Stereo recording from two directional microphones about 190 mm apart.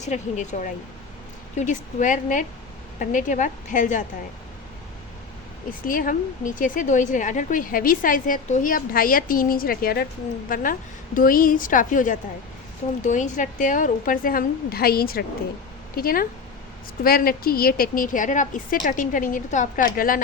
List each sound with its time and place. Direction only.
0.0 s a woman's voice: 40° left (ahead or behind)
5.8 s a woman's voice: 45° left (ahead or behind)